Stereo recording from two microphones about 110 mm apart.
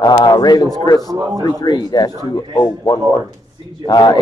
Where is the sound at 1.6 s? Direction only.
40° left (ahead or behind).